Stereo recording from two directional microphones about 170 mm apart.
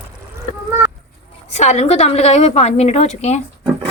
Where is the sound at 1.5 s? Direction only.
40° left (ahead or behind).